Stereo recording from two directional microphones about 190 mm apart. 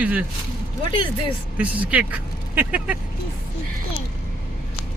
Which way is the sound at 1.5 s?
5° right (ahead or behind).